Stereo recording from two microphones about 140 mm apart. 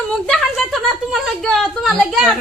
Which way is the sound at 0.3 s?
Centre (ahead or behind).